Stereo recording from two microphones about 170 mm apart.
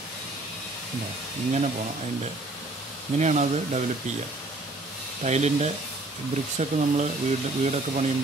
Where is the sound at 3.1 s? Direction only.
45° right (ahead or behind).